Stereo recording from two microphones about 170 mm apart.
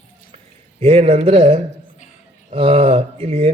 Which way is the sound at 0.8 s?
35° right (ahead or behind).